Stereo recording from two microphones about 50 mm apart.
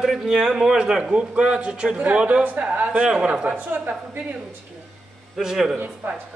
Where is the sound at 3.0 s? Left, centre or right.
Centre; by 4.2 s right.